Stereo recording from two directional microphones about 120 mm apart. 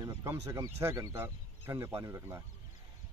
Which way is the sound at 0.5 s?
25° right (ahead or behind).